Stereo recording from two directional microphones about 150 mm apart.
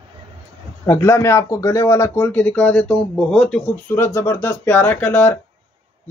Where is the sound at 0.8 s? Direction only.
20° left (ahead or behind).